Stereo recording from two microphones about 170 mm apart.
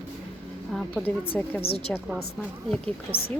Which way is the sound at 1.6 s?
35° left (ahead or behind).